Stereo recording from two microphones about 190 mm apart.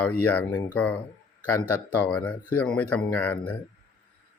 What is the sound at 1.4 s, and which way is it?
Speech, 10° left (ahead or behind).